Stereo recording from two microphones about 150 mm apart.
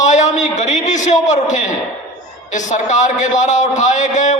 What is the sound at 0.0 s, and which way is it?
A man's voice, 55° left (ahead or behind).